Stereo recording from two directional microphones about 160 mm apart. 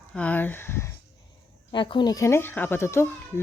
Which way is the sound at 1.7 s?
30° left (ahead or behind).